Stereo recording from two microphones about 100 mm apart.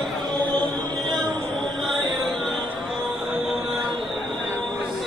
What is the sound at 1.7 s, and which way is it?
Music, centre (ahead or behind).